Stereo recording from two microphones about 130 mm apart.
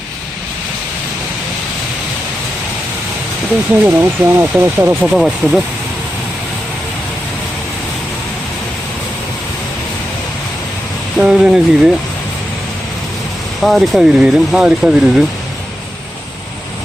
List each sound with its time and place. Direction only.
3.8 s speech: 15° right (ahead or behind)
5.1 s speech: centre (ahead or behind)
11.2 s speech: 5° right (ahead or behind)
13.6 s speech: centre (ahead or behind)